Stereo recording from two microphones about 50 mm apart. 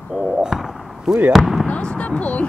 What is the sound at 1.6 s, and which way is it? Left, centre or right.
Speech, left.